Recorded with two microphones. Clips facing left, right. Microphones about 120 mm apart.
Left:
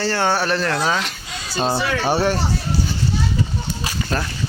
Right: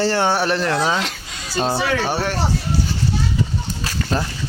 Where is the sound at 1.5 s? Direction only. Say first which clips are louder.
Right 1 dB; 10° left (ahead or behind).